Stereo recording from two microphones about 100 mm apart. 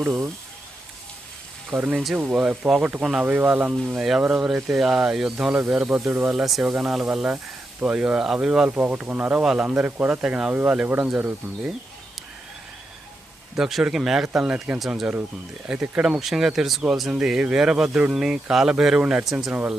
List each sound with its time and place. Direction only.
0.0 s speech: 20° right (ahead or behind)
1.7 s speech: 15° right (ahead or behind)
3.9 s speech: 5° right (ahead or behind)
5.9 s speech: 20° right (ahead or behind)
6.3 s speech: 5° right (ahead or behind)
13.6 s speech: 5° right (ahead or behind)